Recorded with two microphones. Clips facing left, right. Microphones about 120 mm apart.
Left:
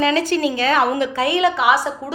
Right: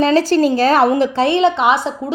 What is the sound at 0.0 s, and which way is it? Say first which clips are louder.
A woman's voice: right 5 dB; 35° right (ahead or behind).